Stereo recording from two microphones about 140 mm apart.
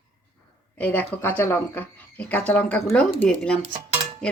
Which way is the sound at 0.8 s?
10° left (ahead or behind).